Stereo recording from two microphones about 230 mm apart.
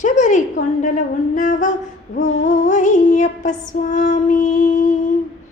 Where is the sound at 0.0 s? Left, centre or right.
Left.